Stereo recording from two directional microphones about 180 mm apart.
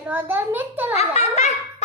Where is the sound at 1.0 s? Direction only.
40° left (ahead or behind).